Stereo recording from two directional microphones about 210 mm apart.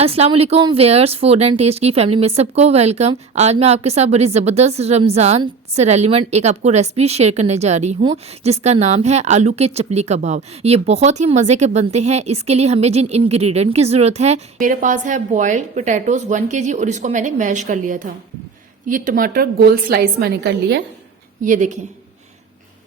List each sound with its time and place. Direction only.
0.0 s a woman's voice: 30° right (ahead or behind); by 20.8 s 50° right (ahead or behind)
21.4 s speech: 35° right (ahead or behind)